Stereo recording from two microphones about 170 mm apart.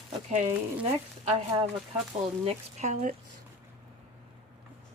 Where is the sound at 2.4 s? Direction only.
40° right (ahead or behind).